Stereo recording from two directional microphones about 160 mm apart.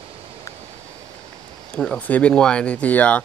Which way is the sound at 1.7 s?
5° left (ahead or behind).